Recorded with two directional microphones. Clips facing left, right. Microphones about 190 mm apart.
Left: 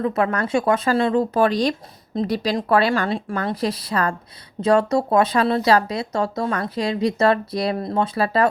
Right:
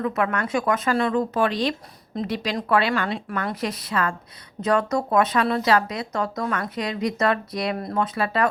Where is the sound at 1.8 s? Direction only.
25° left (ahead or behind).